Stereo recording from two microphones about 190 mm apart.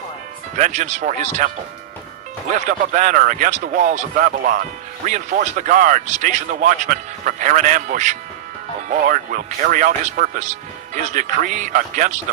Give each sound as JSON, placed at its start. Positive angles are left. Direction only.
{"t": 0.5, "sound": "speech", "side_deg": -40}